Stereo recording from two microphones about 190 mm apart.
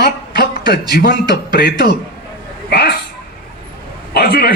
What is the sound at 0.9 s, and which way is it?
Speech, 50° left (ahead or behind).